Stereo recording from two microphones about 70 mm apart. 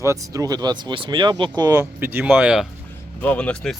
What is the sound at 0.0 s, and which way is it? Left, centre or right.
Speech, right.